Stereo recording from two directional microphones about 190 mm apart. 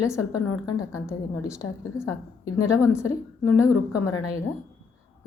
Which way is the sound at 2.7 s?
15° left (ahead or behind).